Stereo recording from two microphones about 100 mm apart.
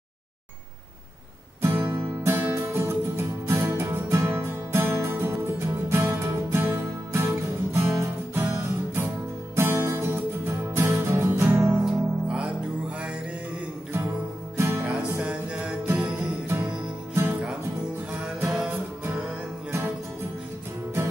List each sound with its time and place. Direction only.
1.8 s music: 25° right (ahead or behind)
11.8 s music: 10° right (ahead or behind)
14.6 s music: 25° right (ahead or behind)
14.9 s music: 10° right (ahead or behind)
18.4 s music: 15° right (ahead or behind)